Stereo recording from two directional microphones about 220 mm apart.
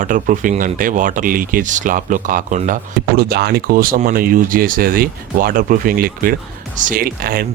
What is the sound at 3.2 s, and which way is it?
Speech, 45° right (ahead or behind).